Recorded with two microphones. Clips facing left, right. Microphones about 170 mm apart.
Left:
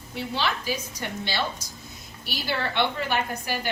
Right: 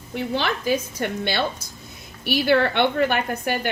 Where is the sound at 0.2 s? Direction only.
55° right (ahead or behind).